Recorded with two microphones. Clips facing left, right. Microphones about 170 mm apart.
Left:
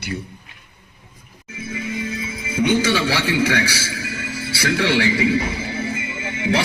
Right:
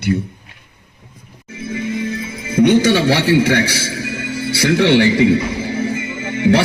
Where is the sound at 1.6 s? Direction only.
50° right (ahead or behind).